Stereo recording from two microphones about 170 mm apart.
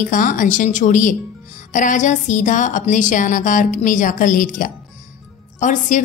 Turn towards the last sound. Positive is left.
turn(degrees=45)  # may be behind; listen again after turning